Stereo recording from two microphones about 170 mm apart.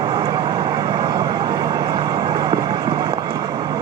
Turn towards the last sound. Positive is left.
turn(degrees=-25)  # may be behind; listen again after turning